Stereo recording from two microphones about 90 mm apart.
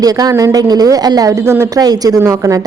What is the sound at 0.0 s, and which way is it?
A woman's voice, 45° right (ahead or behind).